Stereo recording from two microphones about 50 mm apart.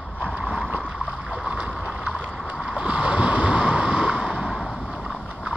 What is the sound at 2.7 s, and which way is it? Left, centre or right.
Boat, right.